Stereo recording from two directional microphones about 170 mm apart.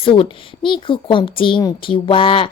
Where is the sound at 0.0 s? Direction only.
30° left (ahead or behind).